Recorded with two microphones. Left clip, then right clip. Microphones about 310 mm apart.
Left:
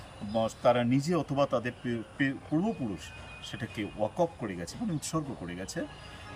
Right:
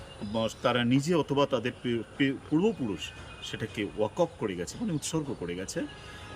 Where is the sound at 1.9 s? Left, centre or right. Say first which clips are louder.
Right 4 dB; left.